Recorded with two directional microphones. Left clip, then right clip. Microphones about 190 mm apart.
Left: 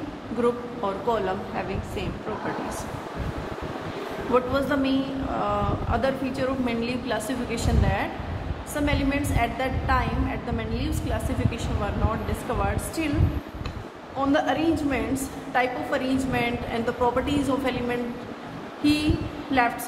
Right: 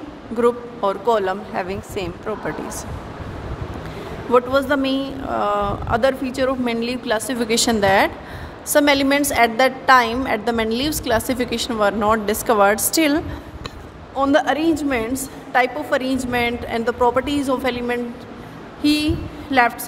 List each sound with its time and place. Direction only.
0.4 s a woman's voice: 60° right (ahead or behind)
4.3 s a woman's voice: 65° right (ahead or behind)
14.1 s a woman's voice: 70° right (ahead or behind)